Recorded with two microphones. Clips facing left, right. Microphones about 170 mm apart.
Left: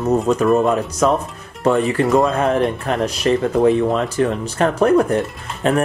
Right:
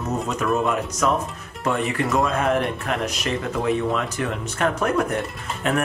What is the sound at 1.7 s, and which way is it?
Speech, 30° left (ahead or behind).